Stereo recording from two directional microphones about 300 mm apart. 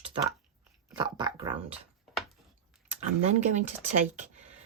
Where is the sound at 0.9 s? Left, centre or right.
Centre.